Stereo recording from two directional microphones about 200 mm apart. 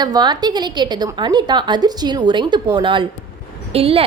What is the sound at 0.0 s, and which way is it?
A woman's voice, 20° right (ahead or behind).